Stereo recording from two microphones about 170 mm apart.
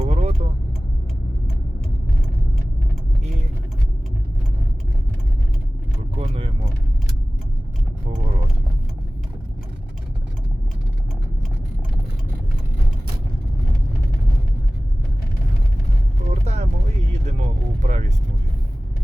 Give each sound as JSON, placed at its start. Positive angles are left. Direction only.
{"t": 0.0, "sound": "vehicle", "side_deg": -40}
{"t": 6.1, "sound": "vehicle", "side_deg": -35}
{"t": 16.3, "sound": "vehicle", "side_deg": -40}